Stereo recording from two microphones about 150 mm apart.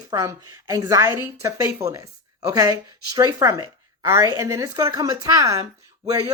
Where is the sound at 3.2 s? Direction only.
25° right (ahead or behind).